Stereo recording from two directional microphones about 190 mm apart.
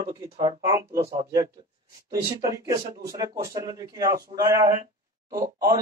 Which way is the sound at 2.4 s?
20° right (ahead or behind).